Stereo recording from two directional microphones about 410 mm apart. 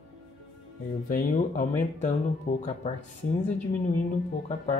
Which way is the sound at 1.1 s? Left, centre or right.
Centre.